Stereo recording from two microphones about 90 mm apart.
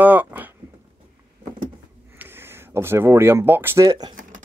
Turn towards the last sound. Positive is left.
turn(degrees=-40)  # may be behind; listen again after turning